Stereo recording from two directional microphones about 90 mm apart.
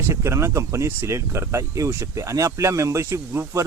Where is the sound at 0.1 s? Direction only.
35° right (ahead or behind).